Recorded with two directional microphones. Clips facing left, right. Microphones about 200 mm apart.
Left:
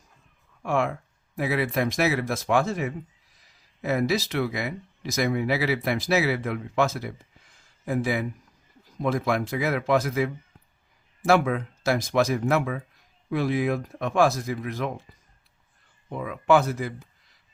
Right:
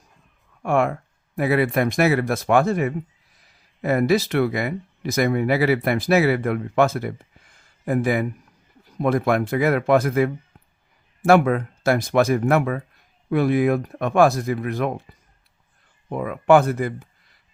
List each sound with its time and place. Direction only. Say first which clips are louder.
0.6 s speech: right 5 dB; 55° right (ahead or behind)
16.0 s speech: right 5 dB; 55° right (ahead or behind)